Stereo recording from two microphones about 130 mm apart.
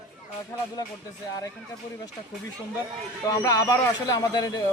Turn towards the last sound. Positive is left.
turn(degrees=30)  # may be behind; listen again after turning